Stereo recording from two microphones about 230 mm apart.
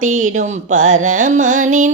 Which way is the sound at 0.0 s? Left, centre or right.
Right.